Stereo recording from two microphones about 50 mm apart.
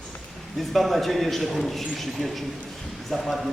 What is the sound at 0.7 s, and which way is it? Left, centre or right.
A man's voice, centre.